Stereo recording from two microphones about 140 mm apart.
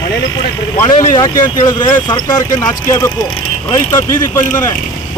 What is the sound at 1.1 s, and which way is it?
Speech, 30° left (ahead or behind).